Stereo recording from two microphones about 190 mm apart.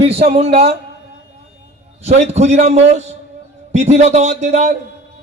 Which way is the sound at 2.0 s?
35° right (ahead or behind).